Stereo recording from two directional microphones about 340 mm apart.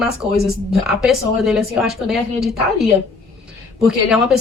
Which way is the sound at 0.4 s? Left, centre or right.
Centre.